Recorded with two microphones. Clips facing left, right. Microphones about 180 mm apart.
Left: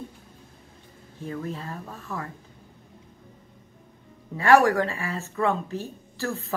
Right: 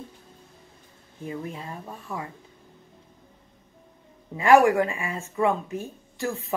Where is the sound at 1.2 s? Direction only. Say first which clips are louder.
Left 1 dB; 15° right (ahead or behind).